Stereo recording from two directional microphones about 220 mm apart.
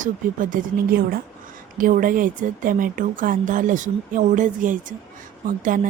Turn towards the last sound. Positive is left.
turn(degrees=-40)  # may be behind; listen again after turning